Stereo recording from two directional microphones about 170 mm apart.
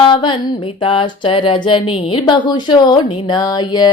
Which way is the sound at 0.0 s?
30° left (ahead or behind).